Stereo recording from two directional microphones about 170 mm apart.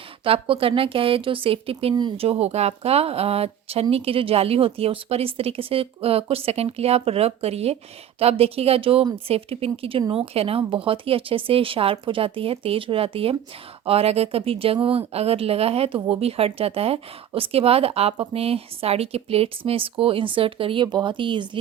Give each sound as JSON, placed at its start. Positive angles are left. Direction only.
{"t": 0.3, "sound": "speech", "side_deg": -35}